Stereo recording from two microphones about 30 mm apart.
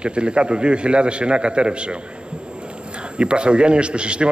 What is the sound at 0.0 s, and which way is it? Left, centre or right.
A man's voice, right.